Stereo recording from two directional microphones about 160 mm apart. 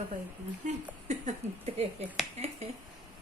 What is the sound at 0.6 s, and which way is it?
Speech, 45° right (ahead or behind).